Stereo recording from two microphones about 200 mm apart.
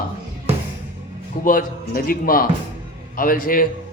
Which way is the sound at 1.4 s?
45° left (ahead or behind).